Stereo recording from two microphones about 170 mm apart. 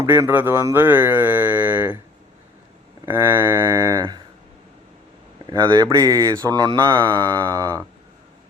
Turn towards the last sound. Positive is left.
turn(degrees=-20)  # may be behind; listen again after turning